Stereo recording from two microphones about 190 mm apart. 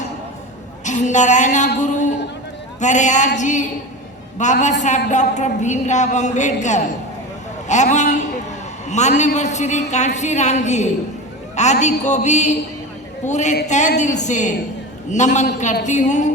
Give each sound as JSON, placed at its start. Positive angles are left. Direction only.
{"t": 0.9, "sound": "a woman's voice", "side_deg": 40}